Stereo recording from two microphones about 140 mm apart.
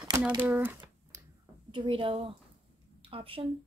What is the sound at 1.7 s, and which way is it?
A woman's voice, 35° right (ahead or behind).